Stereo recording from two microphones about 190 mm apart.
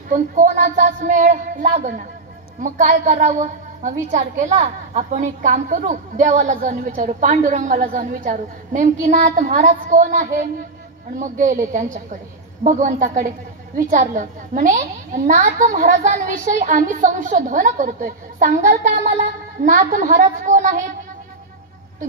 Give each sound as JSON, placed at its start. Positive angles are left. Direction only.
{"t": 0.1, "sound": "a woman's voice", "side_deg": -40}